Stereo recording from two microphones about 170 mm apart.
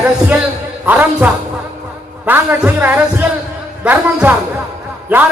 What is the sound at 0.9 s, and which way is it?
A man's voice, 10° right (ahead or behind).